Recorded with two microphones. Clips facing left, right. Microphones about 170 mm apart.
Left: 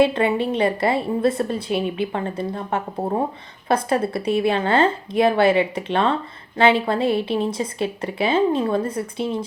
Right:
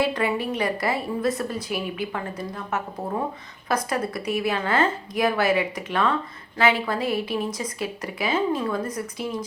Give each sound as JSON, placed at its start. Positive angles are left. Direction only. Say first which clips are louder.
{"t": 0.0, "sound": "a woman's voice", "louder": "left 6 dB", "side_deg": 25}